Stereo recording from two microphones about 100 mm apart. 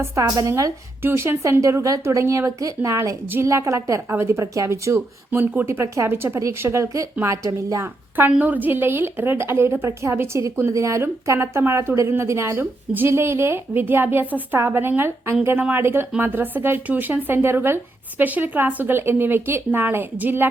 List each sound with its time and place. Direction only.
0.0 s a woman's voice: 35° right (ahead or behind); by 20.5 s 20° right (ahead or behind)